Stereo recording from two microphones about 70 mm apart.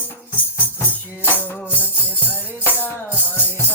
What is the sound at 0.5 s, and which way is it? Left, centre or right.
Music, left.